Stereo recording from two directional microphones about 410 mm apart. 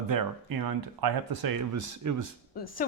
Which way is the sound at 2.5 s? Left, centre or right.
Left.